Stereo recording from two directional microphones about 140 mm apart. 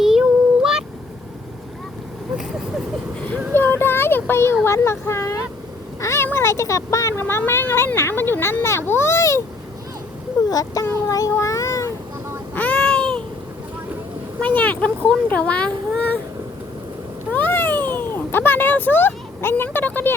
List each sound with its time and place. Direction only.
0.0 s child singing: 5° right (ahead or behind)
3.5 s child singing: 15° left (ahead or behind)
4.6 s speech: 20° left (ahead or behind)
10.5 s speech: 25° left (ahead or behind)
12.5 s a sound: 10° left (ahead or behind)
14.4 s speech: 10° left (ahead or behind)
17.3 s a sound: 15° left (ahead or behind)